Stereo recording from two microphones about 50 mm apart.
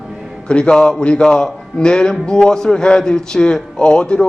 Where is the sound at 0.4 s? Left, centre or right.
Left.